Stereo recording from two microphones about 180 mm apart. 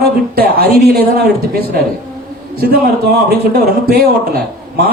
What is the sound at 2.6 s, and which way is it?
Speech, 55° right (ahead or behind).